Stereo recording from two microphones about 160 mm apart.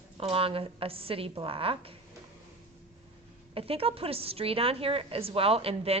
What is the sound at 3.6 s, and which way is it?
A woman's voice, 35° right (ahead or behind).